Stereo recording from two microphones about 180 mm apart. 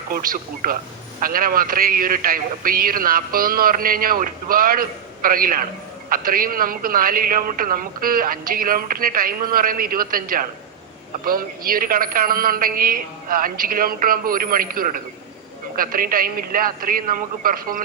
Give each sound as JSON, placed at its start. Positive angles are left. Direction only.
{"t": 0.1, "sound": "a man's voice", "side_deg": -50}